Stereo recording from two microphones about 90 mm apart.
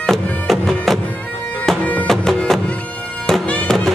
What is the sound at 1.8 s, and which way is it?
Music, 15° left (ahead or behind).